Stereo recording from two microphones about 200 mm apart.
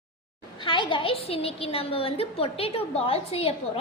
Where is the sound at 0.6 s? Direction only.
25° left (ahead or behind).